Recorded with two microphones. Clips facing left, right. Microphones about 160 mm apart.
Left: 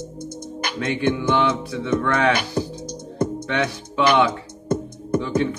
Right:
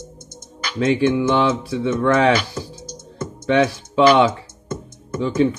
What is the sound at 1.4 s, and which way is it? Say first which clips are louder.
Speech: right 2 dB; 30° right (ahead or behind).